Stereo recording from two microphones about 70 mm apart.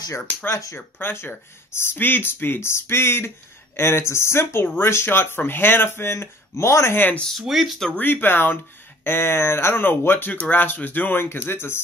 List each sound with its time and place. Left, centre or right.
1.1 s speech: left
7.2 s speech: centre
8.0 s speech: left